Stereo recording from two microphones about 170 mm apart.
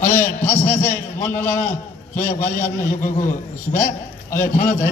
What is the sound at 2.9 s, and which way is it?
A man's voice, 50° left (ahead or behind).